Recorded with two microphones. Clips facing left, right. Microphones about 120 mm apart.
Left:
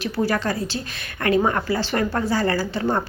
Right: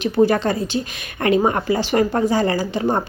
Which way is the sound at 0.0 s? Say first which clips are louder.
Right 6 dB; 20° right (ahead or behind).